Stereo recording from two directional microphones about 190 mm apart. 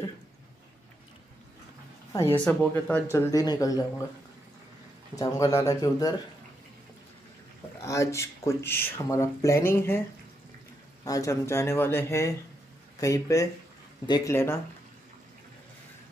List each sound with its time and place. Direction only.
2.4 s speech: 5° left (ahead or behind)
5.1 s speech: 20° left (ahead or behind)
7.8 s speech: 15° left (ahead or behind)
11.1 s speech: 15° left (ahead or behind)